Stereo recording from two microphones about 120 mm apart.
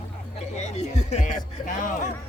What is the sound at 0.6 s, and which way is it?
Speech, 65° left (ahead or behind).